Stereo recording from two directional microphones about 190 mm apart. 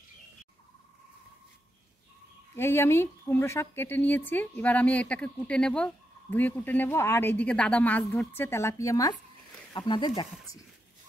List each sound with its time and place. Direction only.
2.5 s speech: 10° left (ahead or behind)